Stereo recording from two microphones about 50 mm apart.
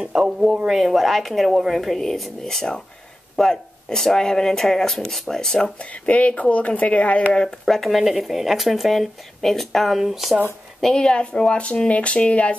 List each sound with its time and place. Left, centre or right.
0.0 s speech: centre
6.0 s speech: left
7.4 s speech: centre
10.8 s speech: centre